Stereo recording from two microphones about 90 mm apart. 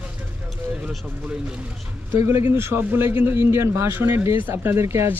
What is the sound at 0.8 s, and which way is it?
Speech, 10° right (ahead or behind).